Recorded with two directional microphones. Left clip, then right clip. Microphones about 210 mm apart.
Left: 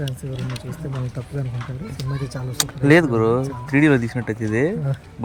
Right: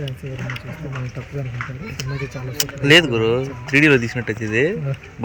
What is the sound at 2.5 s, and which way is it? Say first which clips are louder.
Speech: right 2 dB; 20° left (ahead or behind).